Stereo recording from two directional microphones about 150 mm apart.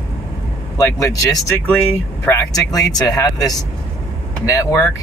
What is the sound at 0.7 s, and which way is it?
Speech, 20° left (ahead or behind).